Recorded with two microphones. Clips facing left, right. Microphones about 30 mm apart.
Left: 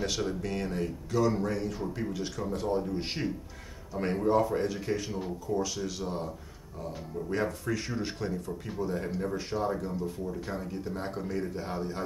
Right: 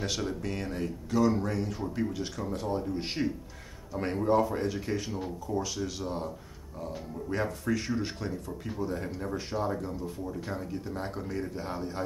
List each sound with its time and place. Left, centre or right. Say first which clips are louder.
0.0 s speech: left 1 dB; centre